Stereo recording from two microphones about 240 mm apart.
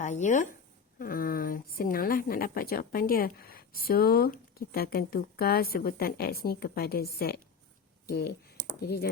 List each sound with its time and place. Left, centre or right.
0.0 s a woman's voice: left